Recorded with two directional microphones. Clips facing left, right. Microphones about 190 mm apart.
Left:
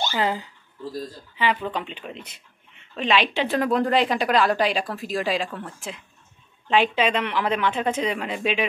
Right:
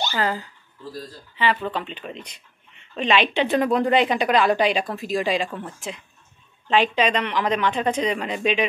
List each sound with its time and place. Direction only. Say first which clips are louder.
0.1 s a woman's voice: even; 20° left (ahead or behind)